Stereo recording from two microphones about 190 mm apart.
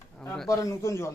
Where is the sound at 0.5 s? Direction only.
15° left (ahead or behind).